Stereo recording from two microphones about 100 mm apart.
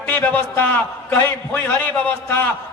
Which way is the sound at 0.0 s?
20° left (ahead or behind).